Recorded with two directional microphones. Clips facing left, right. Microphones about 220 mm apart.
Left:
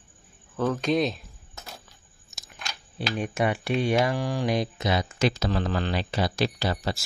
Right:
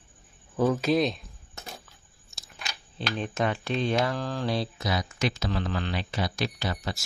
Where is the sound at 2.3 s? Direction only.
20° left (ahead or behind).